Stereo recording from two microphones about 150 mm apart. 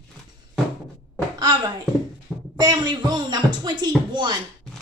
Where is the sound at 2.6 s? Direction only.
30° right (ahead or behind).